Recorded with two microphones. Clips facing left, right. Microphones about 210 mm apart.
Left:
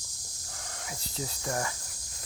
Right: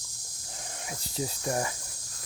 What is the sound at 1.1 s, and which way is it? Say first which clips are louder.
Speech: right 3 dB; 15° right (ahead or behind).